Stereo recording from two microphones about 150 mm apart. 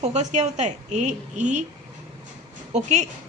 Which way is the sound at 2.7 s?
50° right (ahead or behind).